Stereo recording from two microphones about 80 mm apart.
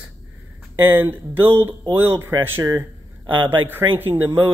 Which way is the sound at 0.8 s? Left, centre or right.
Right.